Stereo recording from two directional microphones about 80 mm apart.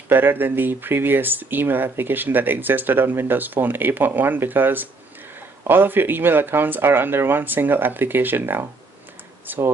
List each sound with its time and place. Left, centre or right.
0.1 s speech: right